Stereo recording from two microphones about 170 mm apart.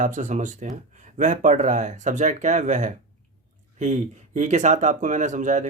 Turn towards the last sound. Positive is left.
turn(degrees=-45)  # may be behind; listen again after turning